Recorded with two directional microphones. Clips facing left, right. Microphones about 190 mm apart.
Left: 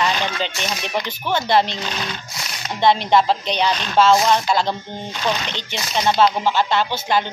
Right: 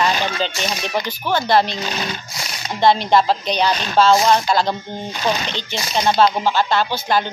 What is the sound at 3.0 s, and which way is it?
Speech, 20° left (ahead or behind).